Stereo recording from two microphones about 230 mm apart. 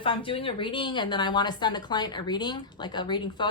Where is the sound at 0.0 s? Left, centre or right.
Left.